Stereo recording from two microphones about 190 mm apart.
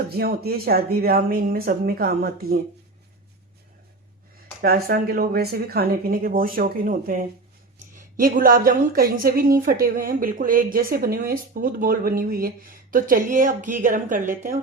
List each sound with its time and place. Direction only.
0.1 s a woman's voice: 55° right (ahead or behind)
4.6 s a woman's voice: 55° right (ahead or behind)